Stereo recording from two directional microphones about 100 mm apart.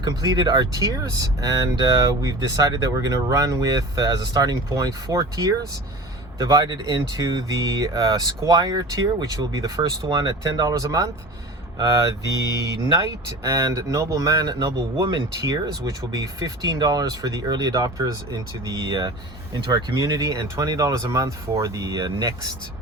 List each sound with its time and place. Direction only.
0.0 s speech: 45° right (ahead or behind)
20.0 s speech: 40° right (ahead or behind)